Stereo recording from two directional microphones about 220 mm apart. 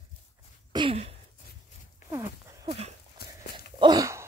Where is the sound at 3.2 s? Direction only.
45° left (ahead or behind).